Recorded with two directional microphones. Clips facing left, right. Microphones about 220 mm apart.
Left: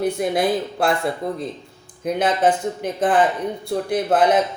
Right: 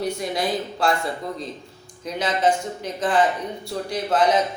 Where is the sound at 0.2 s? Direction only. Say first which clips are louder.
Left 5 dB; 55° left (ahead or behind).